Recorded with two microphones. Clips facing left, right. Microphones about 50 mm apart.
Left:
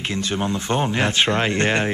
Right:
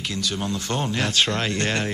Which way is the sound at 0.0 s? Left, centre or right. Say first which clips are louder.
Left 4 dB; left.